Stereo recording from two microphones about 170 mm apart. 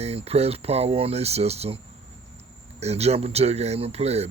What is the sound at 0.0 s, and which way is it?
Speech, 35° right (ahead or behind).